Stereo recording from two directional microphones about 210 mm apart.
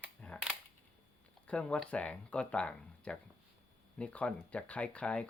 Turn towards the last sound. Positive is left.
turn(degrees=5)  # may be behind; listen again after turning